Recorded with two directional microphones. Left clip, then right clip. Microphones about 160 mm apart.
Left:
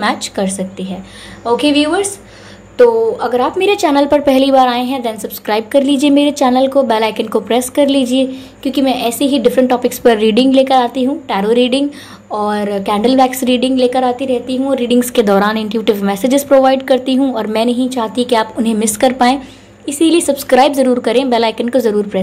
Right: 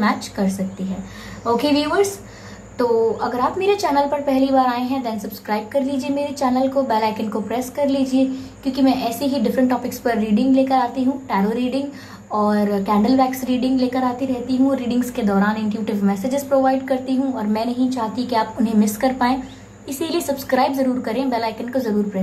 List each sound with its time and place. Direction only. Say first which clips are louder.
0.0 s a woman's voice: left 5 dB; 45° left (ahead or behind)
1.6 s a woman's voice: left 4 dB; 40° left (ahead or behind)
3.2 s a woman's voice: left 7 dB; 40° left (ahead or behind)